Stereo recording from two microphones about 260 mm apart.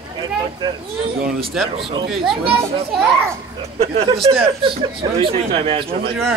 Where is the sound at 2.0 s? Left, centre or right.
Centre.